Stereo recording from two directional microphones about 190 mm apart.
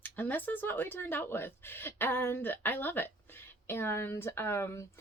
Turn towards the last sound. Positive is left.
turn(degrees=15)  # may be behind; listen again after turning